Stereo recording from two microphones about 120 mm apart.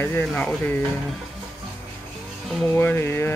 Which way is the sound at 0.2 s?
10° left (ahead or behind).